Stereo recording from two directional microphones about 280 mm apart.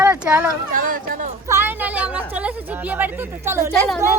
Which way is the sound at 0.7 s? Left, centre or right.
Right.